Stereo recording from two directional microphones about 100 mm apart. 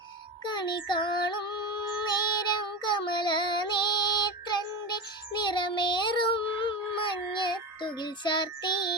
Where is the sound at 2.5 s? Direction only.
50° left (ahead or behind).